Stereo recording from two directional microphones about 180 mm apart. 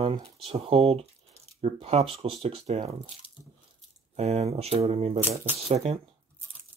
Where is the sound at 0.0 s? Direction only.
30° right (ahead or behind).